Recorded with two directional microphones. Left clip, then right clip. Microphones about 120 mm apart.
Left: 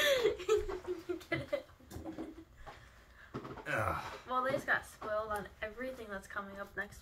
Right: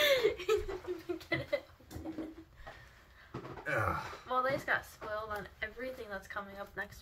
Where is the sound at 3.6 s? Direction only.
35° left (ahead or behind).